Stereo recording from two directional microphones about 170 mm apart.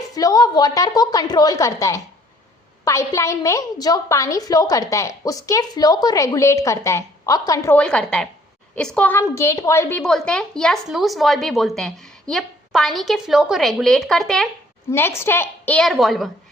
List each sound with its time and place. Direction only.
0.1 s a woman's voice: 20° left (ahead or behind)
7.8 s a woman's voice: 5° left (ahead or behind)
10.0 s a woman's voice: 5° left (ahead or behind)
14.8 s a woman's voice: 15° left (ahead or behind)